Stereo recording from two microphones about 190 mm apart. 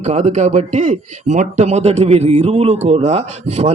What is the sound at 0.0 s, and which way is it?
A man's voice, 35° right (ahead or behind).